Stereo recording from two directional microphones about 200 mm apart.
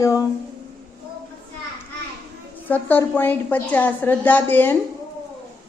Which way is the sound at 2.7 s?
10° left (ahead or behind).